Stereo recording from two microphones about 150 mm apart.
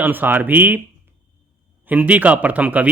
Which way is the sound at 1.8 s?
10° right (ahead or behind).